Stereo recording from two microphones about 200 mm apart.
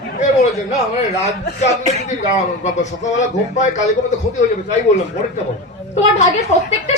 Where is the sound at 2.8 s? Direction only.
35° left (ahead or behind).